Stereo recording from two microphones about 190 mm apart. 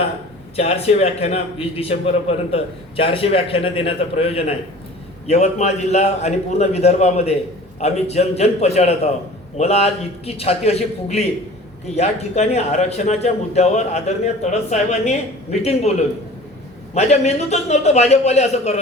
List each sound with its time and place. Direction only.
0.5 s a man's voice: 35° left (ahead or behind)